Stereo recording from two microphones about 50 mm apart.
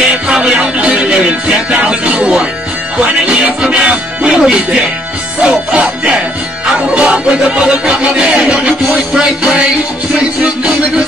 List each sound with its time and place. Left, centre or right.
0.3 s music: right
3.6 s music: centre